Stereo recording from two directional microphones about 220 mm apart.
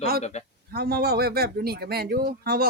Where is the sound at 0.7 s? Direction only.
45° right (ahead or behind).